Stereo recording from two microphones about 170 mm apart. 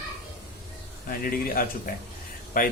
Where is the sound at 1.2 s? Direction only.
55° left (ahead or behind).